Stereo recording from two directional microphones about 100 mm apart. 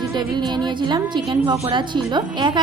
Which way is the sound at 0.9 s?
50° right (ahead or behind).